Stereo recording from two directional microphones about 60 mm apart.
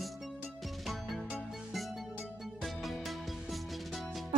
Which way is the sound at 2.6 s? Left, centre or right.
Centre.